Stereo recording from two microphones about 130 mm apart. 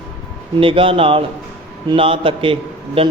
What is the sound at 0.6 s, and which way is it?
A man's voice, 45° right (ahead or behind).